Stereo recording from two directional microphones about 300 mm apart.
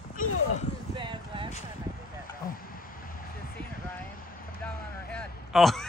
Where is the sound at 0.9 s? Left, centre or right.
Centre.